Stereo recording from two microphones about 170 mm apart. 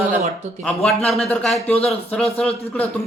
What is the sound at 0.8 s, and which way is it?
Speech, centre (ahead or behind).